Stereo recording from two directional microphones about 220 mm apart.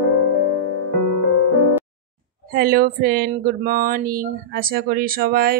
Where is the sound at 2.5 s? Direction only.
45° right (ahead or behind).